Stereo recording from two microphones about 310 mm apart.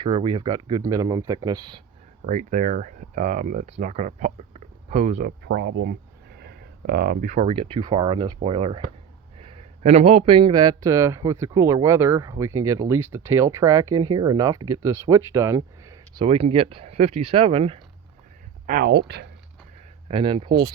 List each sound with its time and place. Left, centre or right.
0.0 s speech: centre
2.2 s speech: right
5.5 s speech: right; by 17.7 s centre
18.6 s speech: right
20.1 s speech: centre